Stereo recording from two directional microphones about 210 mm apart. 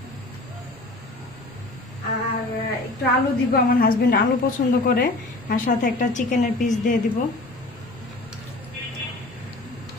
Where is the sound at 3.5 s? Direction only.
45° left (ahead or behind).